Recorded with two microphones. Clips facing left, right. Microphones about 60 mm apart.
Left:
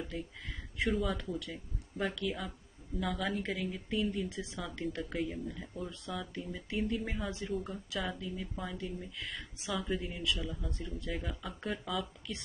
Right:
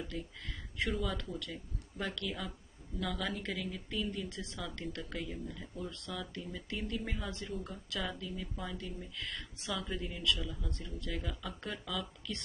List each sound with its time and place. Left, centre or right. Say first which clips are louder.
0.0 s speech: left 1 dB; centre
8.5 s speech: left 2 dB; centre